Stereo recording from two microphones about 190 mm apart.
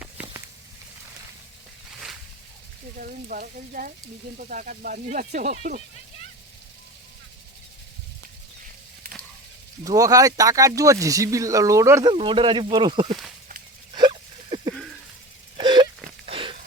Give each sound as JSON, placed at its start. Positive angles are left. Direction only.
{"t": 3.0, "sound": "speech", "side_deg": -45}
{"t": 9.8, "sound": "speech", "side_deg": -20}
{"t": 12.1, "sound": "speech", "side_deg": -25}
{"t": 13.9, "sound": "hiccup", "side_deg": -25}
{"t": 15.5, "sound": "wail", "side_deg": -25}
{"t": 16.2, "sound": "a sound", "side_deg": -30}